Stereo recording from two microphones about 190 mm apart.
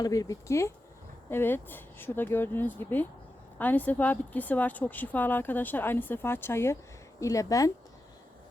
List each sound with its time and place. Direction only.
0.0 s a woman's voice: 20° left (ahead or behind)